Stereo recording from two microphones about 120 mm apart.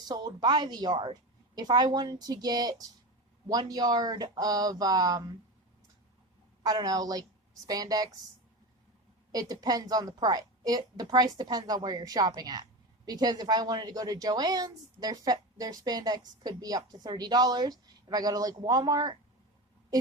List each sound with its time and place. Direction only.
0.0 s a woman's voice: 35° right (ahead or behind)
6.6 s a woman's voice: 35° right (ahead or behind)
9.3 s a woman's voice: 30° right (ahead or behind)